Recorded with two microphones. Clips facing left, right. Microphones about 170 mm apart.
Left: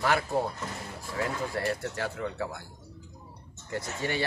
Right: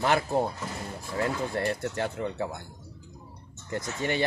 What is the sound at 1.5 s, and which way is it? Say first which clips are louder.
Speech: right 2 dB; 25° right (ahead or behind).